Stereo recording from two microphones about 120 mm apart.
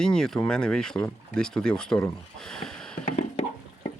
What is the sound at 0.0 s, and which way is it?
Speech, 5° left (ahead or behind).